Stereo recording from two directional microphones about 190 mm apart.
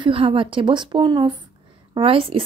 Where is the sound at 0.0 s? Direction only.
30° right (ahead or behind).